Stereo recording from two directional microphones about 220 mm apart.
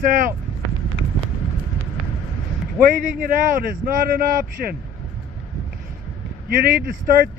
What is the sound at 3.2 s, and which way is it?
A man's voice, 40° right (ahead or behind).